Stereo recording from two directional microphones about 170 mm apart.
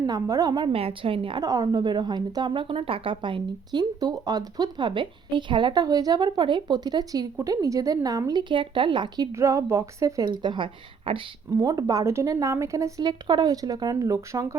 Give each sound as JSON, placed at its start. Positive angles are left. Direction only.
{"t": 0.0, "sound": "a woman's voice", "side_deg": -20}